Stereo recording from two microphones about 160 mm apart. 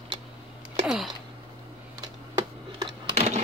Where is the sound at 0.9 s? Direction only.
Centre (ahead or behind).